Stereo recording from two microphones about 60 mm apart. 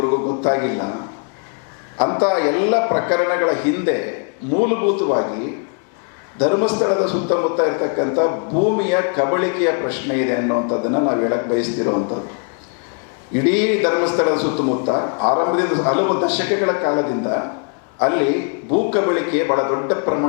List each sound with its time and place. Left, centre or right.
0.0 s a man's voice: left
13.3 s a man's voice: centre